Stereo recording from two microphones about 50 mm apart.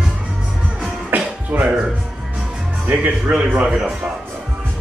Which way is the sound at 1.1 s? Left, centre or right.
Right.